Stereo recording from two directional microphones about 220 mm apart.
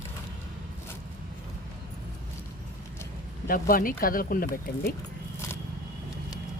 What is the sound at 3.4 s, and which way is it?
Speech, 40° left (ahead or behind).